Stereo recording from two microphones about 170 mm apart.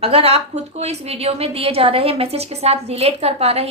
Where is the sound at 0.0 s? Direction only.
35° right (ahead or behind).